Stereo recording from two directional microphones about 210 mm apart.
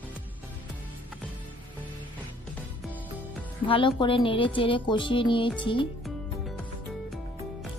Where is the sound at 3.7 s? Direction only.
25° left (ahead or behind).